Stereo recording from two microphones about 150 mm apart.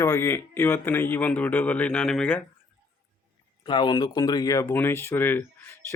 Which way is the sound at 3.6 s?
30° left (ahead or behind).